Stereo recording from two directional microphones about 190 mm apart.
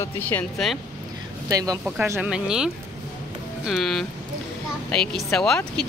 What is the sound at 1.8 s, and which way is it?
Speech, 5° right (ahead or behind).